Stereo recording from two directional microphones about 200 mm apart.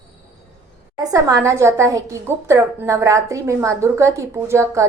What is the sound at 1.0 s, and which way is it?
A woman's voice, 15° right (ahead or behind).